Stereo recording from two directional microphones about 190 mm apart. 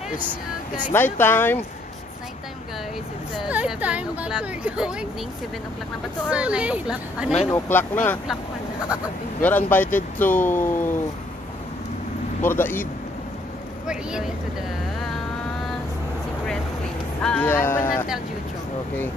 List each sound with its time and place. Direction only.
0.9 s speech: 10° left (ahead or behind)
3.4 s speech: 5° right (ahead or behind)
6.3 s a woman's voice: 5° right (ahead or behind)
7.4 s speech: 10° left (ahead or behind)
12.4 s speech: 10° left (ahead or behind)
13.8 s a woman's voice: 5° right (ahead or behind)
17.2 s speech: 5° left (ahead or behind)